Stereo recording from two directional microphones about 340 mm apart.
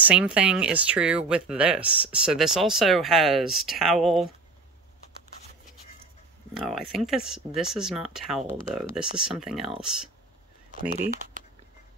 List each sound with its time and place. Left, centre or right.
0.0 s speech: centre
6.5 s speech: centre
10.9 s speech: right